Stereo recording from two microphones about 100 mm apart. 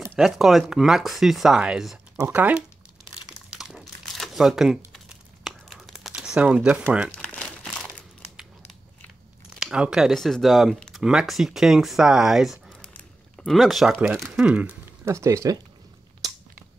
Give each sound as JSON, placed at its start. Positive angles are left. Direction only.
{"t": 0.1, "sound": "speech", "side_deg": -5}
{"t": 2.2, "sound": "speech", "side_deg": -20}
{"t": 3.4, "sound": "crumpling", "side_deg": -5}
{"t": 7.2, "sound": "crumpling", "side_deg": 10}
{"t": 9.6, "sound": "speech", "side_deg": -10}
{"t": 12.8, "sound": "a sound", "side_deg": 10}
{"t": 13.6, "sound": "speech", "side_deg": 0}
{"t": 15.0, "sound": "speech", "side_deg": -30}